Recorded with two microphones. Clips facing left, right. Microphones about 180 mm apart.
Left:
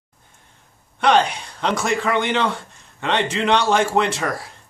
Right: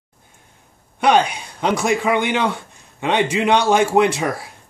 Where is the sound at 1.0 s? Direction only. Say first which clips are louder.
Right 1 dB; 10° right (ahead or behind).